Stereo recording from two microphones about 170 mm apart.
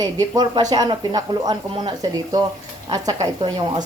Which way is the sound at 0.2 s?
25° right (ahead or behind).